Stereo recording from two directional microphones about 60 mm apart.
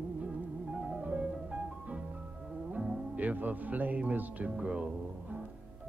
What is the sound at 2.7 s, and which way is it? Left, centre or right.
Speech, right.